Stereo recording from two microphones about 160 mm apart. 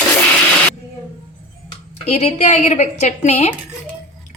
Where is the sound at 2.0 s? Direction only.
40° left (ahead or behind).